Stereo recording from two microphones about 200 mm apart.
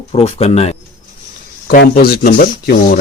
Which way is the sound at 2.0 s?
50° left (ahead or behind).